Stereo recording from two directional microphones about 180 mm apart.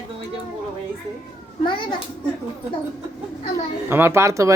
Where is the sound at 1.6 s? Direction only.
25° left (ahead or behind).